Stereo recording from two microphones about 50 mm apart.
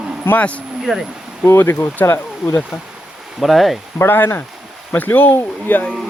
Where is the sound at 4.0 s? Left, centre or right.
Left.